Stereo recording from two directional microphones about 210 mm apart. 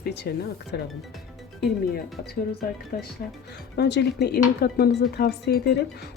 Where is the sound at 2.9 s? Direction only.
45° left (ahead or behind).